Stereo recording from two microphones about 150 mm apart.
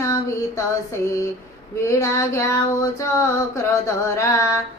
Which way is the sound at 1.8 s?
20° left (ahead or behind).